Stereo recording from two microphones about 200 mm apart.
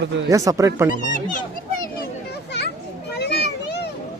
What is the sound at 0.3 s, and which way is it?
Speech, 15° right (ahead or behind).